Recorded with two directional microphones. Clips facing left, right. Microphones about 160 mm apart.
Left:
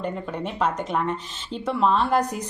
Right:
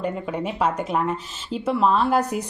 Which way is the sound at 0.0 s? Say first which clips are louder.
Right 3 dB; 10° right (ahead or behind).